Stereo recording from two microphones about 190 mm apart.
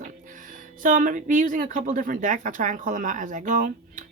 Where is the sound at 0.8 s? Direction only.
45° right (ahead or behind).